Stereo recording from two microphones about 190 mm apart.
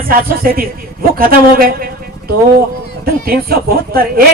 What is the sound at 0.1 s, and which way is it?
A man's voice, 50° right (ahead or behind).